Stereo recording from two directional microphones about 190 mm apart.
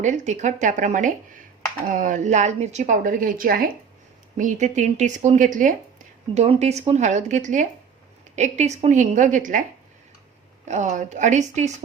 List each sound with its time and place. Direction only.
0.0 s a woman's voice: 40° right (ahead or behind)
10.7 s a woman's voice: 40° right (ahead or behind)